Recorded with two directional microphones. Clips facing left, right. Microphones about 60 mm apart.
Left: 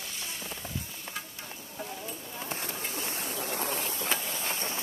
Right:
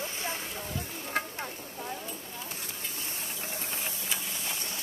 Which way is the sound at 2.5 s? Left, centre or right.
Left.